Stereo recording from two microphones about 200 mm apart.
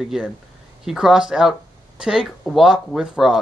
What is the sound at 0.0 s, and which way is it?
Speech, centre (ahead or behind).